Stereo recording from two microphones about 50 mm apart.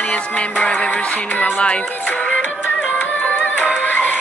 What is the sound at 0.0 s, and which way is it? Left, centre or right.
Music, left.